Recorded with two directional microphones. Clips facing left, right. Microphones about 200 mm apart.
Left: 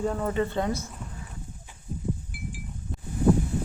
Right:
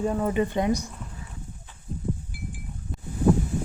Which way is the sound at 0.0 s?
10° right (ahead or behind).